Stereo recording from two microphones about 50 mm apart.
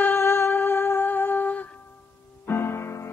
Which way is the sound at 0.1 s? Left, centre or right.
Left.